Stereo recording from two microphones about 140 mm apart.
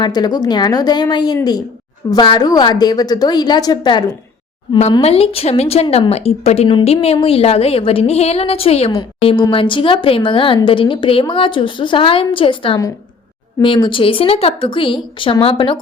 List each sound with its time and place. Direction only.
0.0 s a woman's voice: 30° left (ahead or behind)
4.9 s a woman's voice: 45° left (ahead or behind)